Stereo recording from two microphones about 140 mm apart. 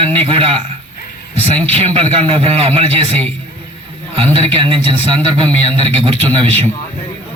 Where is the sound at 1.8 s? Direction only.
45° right (ahead or behind).